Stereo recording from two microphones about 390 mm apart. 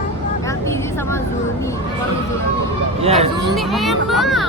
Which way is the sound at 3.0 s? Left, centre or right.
Centre.